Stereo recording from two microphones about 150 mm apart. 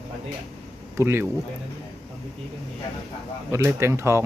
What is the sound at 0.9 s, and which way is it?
Speech, 15° right (ahead or behind).